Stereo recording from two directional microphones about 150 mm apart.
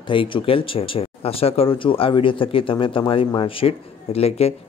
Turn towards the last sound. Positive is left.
turn(degrees=40)  # may be behind; listen again after turning